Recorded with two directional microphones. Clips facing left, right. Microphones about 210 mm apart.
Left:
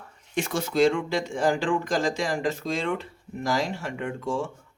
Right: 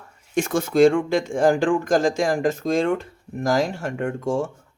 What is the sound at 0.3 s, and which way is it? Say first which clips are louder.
Speech: right 6 dB; 50° right (ahead or behind).